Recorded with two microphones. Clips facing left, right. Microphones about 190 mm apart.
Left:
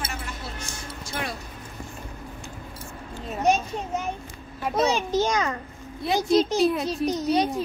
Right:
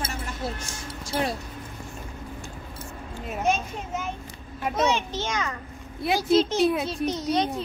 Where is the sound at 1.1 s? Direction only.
35° right (ahead or behind).